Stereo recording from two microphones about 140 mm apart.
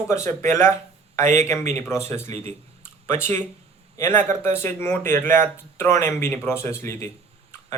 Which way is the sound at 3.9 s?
20° left (ahead or behind).